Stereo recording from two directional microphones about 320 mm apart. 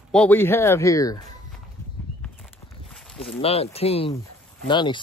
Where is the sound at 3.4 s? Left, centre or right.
Centre.